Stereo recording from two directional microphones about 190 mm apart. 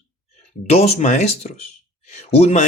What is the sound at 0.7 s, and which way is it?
Speech, 35° left (ahead or behind).